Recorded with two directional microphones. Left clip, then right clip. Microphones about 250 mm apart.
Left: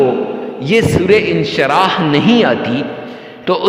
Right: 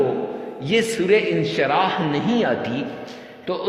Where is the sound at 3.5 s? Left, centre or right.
Left.